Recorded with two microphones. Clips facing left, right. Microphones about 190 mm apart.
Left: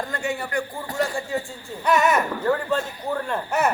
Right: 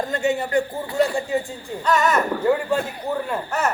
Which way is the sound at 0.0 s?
20° right (ahead or behind).